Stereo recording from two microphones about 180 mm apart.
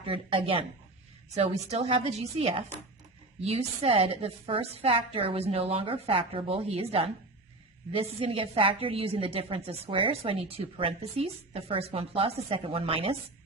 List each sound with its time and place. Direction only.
0.0 s speech: 30° right (ahead or behind)
1.7 s a woman's voice: 35° right (ahead or behind)